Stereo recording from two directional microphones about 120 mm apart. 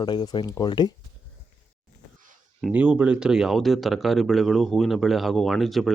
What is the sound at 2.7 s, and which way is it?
Speech, 10° right (ahead or behind).